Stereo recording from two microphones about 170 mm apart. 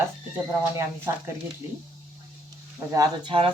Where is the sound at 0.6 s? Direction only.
20° right (ahead or behind).